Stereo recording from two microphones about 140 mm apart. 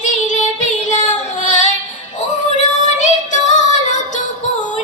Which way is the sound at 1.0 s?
60° left (ahead or behind).